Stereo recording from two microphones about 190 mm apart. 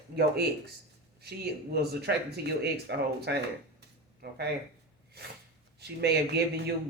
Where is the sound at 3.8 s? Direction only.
60° right (ahead or behind).